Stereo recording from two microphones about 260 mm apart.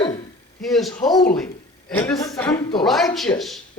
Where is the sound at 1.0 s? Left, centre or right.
Centre.